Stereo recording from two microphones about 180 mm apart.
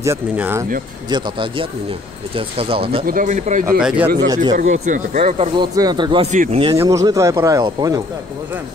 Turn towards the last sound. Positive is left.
turn(degrees=-20)  # may be behind; listen again after turning